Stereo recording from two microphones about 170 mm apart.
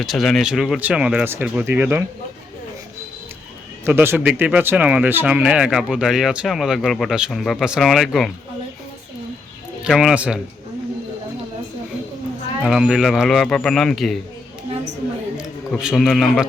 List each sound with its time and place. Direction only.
0.0 s speech: centre (ahead or behind)
3.8 s speech: 15° right (ahead or behind)
9.8 s speech: 5° right (ahead or behind)
12.6 s speech: 5° right (ahead or behind)
15.4 s a man's voice: 5° right (ahead or behind)